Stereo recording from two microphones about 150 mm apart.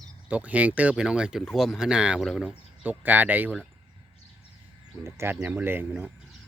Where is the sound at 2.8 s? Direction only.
10° right (ahead or behind).